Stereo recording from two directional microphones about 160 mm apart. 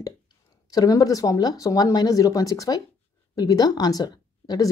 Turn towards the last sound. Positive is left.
turn(degrees=25)  # may be behind; listen again after turning